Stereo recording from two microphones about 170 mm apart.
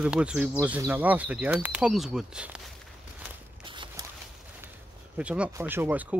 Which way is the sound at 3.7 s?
30° right (ahead or behind).